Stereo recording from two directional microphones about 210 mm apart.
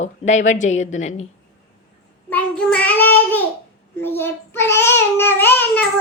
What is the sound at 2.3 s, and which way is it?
Child singing, 5° left (ahead or behind).